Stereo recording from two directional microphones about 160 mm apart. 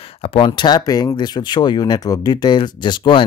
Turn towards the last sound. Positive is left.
turn(degrees=30)  # may be behind; listen again after turning